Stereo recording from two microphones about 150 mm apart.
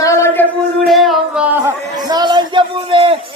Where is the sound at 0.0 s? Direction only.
20° left (ahead or behind).